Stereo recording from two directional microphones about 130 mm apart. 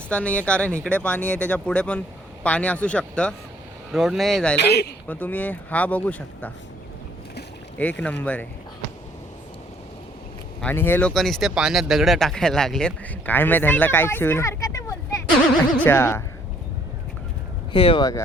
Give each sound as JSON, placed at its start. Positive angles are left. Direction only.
{"t": 0.1, "sound": "speech", "side_deg": 10}
{"t": 3.9, "sound": "speech", "side_deg": -5}
{"t": 7.8, "sound": "speech", "side_deg": 10}
{"t": 10.6, "sound": "speech", "side_deg": 15}
{"t": 11.1, "sound": "speech", "side_deg": 0}
{"t": 15.8, "sound": "speech", "side_deg": 15}
{"t": 17.7, "sound": "speech", "side_deg": 45}